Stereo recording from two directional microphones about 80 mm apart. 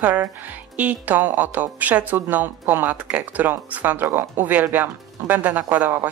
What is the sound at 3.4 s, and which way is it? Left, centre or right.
Speech, right.